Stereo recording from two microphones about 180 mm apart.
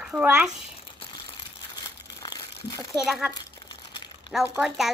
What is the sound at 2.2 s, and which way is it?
Crumpling, 20° left (ahead or behind).